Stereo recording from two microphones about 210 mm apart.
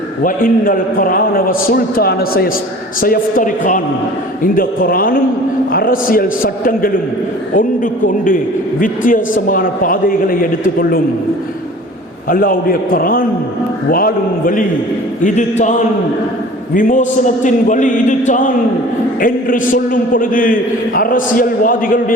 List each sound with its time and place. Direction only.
0.2 s a man's voice: 40° left (ahead or behind)
12.3 s a man's voice: 45° left (ahead or behind)
16.7 s a man's voice: 40° left (ahead or behind)